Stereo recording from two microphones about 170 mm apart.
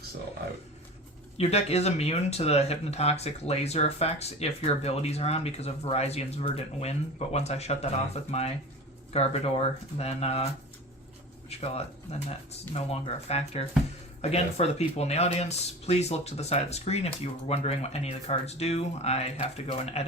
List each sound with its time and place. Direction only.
1.4 s speech: 40° left (ahead or behind)
9.1 s speech: 35° left (ahead or behind)